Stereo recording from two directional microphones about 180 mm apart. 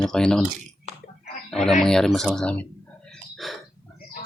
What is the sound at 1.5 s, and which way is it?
Chicken, centre (ahead or behind).